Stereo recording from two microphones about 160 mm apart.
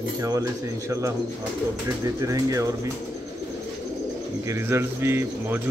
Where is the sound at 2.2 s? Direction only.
20° right (ahead or behind).